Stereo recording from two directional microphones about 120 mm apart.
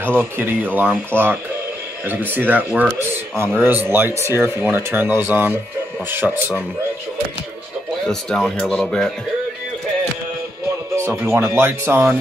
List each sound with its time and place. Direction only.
0.2 s speech: 15° right (ahead or behind)
8.1 s speech: 5° left (ahead or behind)
11.0 s speech: 20° right (ahead or behind)